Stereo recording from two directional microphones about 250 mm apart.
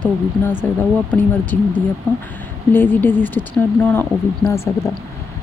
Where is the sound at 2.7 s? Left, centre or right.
Centre.